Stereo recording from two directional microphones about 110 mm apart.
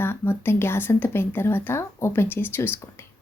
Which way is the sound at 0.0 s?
20° left (ahead or behind).